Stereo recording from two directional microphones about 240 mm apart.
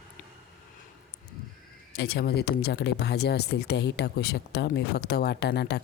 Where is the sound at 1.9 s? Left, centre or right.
Left.